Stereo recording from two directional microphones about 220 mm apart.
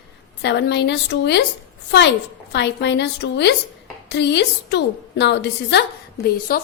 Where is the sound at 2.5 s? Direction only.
50° left (ahead or behind).